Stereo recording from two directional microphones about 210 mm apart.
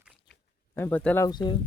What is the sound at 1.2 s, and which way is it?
Speech, 20° left (ahead or behind).